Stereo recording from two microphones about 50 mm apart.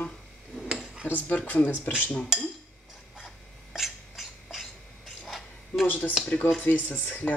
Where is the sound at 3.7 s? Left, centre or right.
Centre.